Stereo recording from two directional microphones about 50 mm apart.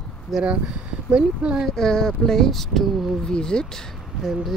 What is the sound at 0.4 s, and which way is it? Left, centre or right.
Speech, centre.